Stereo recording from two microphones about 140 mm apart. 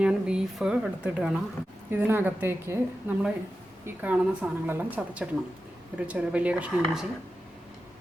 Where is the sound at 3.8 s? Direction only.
10° right (ahead or behind).